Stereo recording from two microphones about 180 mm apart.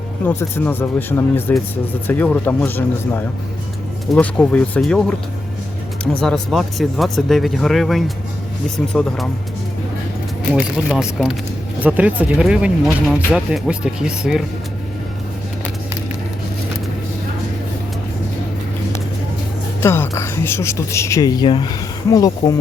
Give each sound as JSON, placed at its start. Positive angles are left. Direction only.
{"t": 0.3, "sound": "speech", "side_deg": 10}
{"t": 6.1, "sound": "speech", "side_deg": 5}
{"t": 10.5, "sound": "speech", "side_deg": -5}
{"t": 19.8, "sound": "speech", "side_deg": 15}